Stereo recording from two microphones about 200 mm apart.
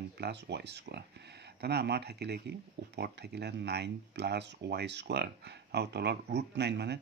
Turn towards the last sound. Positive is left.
turn(degrees=-55)  # may be behind; listen again after turning